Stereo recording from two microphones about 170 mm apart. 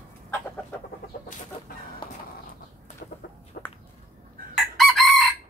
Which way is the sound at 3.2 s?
75° left (ahead or behind).